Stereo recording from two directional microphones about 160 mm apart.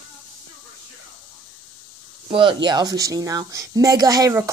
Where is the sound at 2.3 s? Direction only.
30° right (ahead or behind).